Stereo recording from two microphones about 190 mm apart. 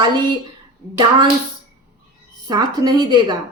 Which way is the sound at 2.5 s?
20° right (ahead or behind).